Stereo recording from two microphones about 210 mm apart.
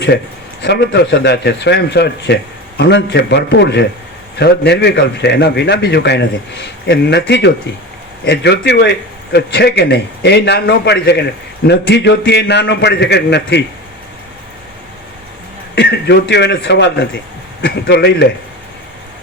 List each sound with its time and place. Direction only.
0.6 s a man's voice: 55° left (ahead or behind)
15.7 s a man's voice: 50° left (ahead or behind)